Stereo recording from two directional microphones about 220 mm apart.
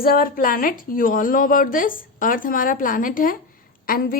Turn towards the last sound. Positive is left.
turn(degrees=40)  # may be behind; listen again after turning